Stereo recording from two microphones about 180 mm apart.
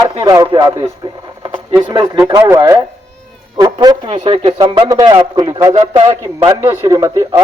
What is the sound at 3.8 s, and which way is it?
Speech, 25° right (ahead or behind).